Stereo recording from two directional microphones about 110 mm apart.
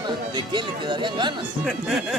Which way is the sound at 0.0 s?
45° right (ahead or behind).